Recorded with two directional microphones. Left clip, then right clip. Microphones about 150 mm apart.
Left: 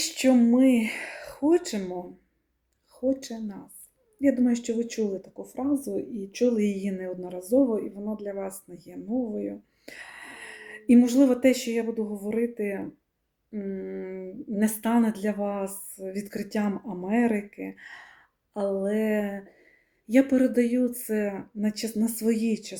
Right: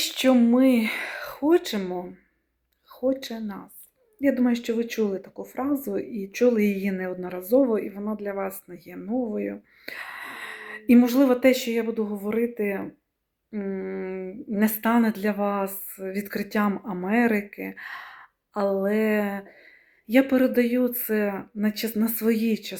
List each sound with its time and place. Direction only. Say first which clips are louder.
0.5 s speech: right 1 dB; 45° right (ahead or behind)
0.9 s speech: right 5 dB; 15° left (ahead or behind)
3.1 s speech: right 2 dB; 15° left (ahead or behind)
5.4 s speech: right 1 dB; 40° right (ahead or behind)
5.8 s speech: right 2 dB; 5° left (ahead or behind)